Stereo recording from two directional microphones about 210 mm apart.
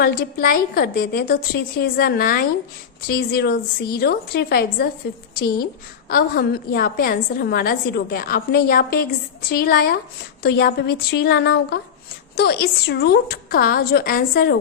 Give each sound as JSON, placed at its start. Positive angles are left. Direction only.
{"t": 0.0, "sound": "a woman's voice", "side_deg": 45}